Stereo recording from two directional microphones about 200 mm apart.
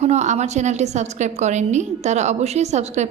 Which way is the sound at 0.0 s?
35° right (ahead or behind).